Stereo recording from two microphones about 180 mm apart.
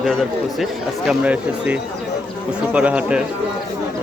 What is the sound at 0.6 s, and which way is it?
Speech, 5° right (ahead or behind).